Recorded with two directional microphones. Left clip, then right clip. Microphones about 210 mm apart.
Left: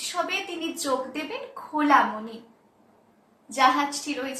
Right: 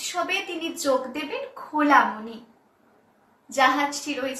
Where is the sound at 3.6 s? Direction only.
10° left (ahead or behind).